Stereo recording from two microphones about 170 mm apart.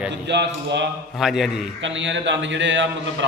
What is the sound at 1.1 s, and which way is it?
Speech, centre (ahead or behind).